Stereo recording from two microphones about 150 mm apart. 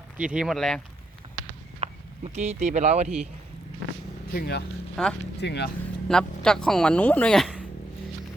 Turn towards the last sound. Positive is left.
turn(degrees=0)  # may be behind; listen again after turning